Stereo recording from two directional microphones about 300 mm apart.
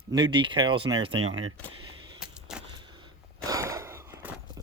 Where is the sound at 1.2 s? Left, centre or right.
Right.